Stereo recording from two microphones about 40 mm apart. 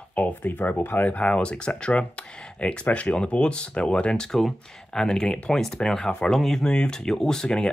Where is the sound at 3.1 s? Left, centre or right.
Left.